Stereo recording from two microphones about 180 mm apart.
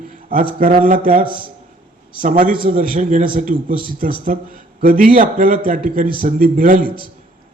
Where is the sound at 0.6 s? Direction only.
50° right (ahead or behind).